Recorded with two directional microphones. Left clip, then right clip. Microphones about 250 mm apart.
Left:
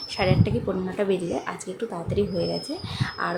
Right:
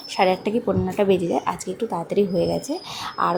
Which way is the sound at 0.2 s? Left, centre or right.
Centre.